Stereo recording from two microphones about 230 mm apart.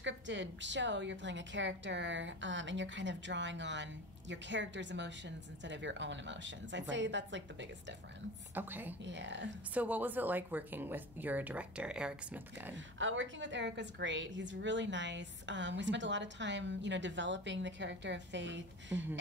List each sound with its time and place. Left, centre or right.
0.0 s a woman's voice: right
8.5 s speech: centre
9.0 s a woman's voice: right
9.8 s speech: centre
12.7 s a woman's voice: right